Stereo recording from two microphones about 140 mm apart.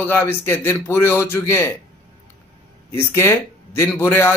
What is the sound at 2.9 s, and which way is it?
A man's voice, 15° left (ahead or behind).